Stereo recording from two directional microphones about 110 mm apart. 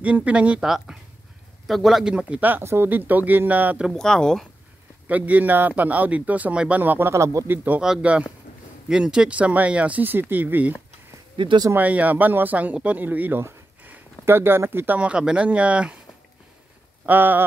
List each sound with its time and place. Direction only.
0.0 s speech: 10° right (ahead or behind)
3.9 s speech: 5° left (ahead or behind)
5.0 s speech: 15° right (ahead or behind)
11.3 s speech: 50° right (ahead or behind)
11.7 s speech: 15° right (ahead or behind)
17.0 s speech: 15° right (ahead or behind)